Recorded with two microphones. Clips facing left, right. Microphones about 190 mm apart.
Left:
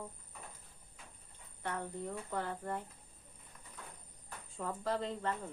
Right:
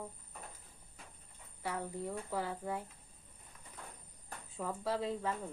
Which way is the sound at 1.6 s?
5° right (ahead or behind).